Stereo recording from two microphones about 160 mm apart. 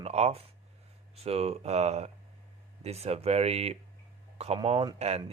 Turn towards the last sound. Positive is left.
turn(degrees=-40)  # may be behind; listen again after turning